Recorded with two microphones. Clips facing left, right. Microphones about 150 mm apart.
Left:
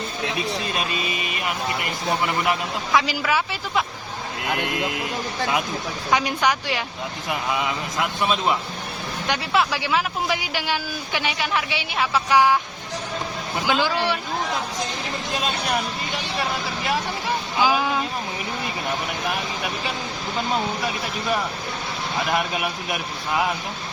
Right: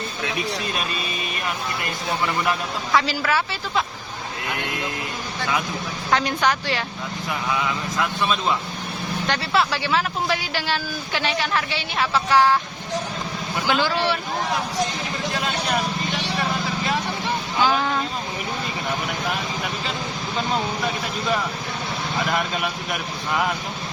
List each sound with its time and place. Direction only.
2.2 s speech: 15° left (ahead or behind)
6.1 s speech: 10° left (ahead or behind)
8.2 s speech: 20° left (ahead or behind)
13.7 s speech: 15° left (ahead or behind)
17.6 s speech: 10° left (ahead or behind)
22.3 s speech: 10° left (ahead or behind)